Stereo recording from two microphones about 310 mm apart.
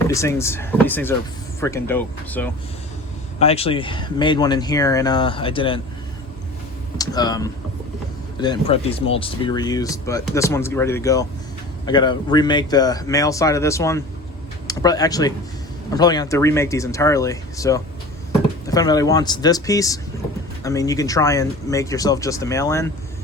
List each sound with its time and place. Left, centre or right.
0.1 s speech: centre
3.3 s speech: centre
7.0 s speech: centre